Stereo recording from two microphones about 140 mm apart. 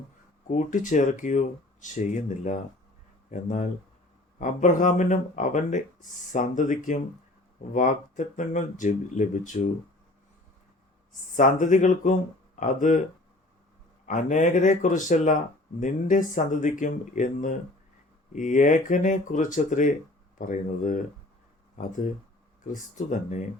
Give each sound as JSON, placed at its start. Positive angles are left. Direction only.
{"t": 0.4, "sound": "speech", "side_deg": 65}
{"t": 11.3, "sound": "speech", "side_deg": 65}
{"t": 14.1, "sound": "speech", "side_deg": 60}